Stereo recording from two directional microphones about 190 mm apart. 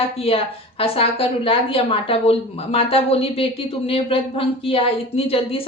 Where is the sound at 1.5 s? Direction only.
30° left (ahead or behind).